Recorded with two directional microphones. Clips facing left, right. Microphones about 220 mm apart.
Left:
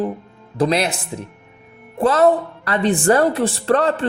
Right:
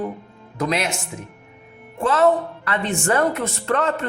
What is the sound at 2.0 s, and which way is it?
Speech, 40° left (ahead or behind).